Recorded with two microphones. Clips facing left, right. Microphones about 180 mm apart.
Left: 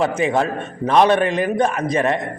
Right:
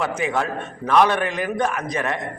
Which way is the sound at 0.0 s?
25° left (ahead or behind).